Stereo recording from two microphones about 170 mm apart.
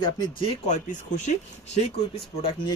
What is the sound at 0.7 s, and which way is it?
Speech, 45° left (ahead or behind).